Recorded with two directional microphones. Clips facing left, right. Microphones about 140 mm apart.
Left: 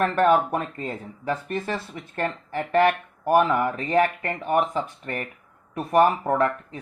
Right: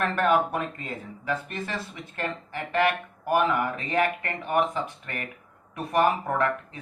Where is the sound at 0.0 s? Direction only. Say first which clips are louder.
Left 4 dB; 35° left (ahead or behind).